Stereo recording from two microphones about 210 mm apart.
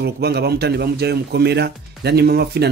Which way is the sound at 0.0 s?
50° right (ahead or behind).